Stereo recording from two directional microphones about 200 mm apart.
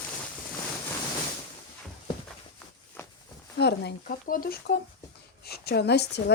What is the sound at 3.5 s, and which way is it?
A woman's voice, 55° left (ahead or behind).